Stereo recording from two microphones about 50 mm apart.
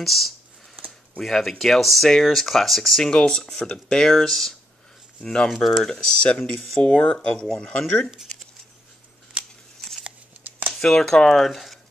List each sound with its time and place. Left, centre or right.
0.0 s speech: centre
4.1 s speech: centre
9.4 s scissors: right
9.8 s a sound: centre
10.7 s speech: centre
11.4 s speech: centre